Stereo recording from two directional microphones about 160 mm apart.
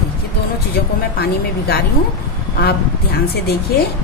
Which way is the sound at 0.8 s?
75° left (ahead or behind).